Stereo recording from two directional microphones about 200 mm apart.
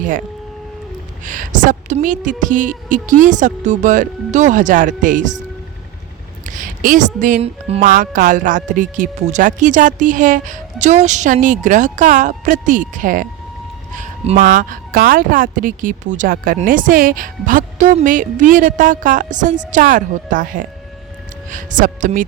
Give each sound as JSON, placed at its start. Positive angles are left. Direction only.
{"t": 1.2, "sound": "speech", "side_deg": -40}
{"t": 6.4, "sound": "speech", "side_deg": -40}
{"t": 7.9, "sound": "speech", "side_deg": -45}